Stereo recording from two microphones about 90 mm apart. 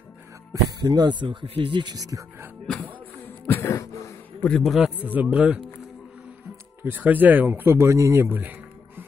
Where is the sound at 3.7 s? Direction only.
40° left (ahead or behind).